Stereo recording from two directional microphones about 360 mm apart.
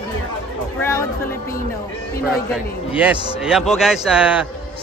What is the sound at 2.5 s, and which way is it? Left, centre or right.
A man's voice, centre.